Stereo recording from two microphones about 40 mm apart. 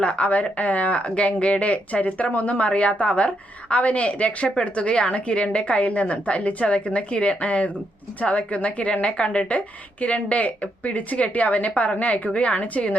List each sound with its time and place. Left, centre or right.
0.0 s a woman's voice: left